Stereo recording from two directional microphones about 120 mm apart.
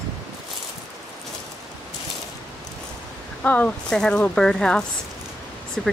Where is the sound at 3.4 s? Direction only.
10° left (ahead or behind).